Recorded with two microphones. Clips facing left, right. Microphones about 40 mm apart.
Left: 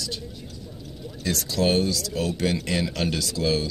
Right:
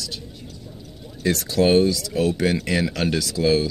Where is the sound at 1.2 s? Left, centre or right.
Right.